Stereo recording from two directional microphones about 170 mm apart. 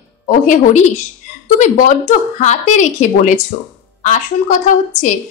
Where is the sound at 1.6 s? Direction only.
50° left (ahead or behind).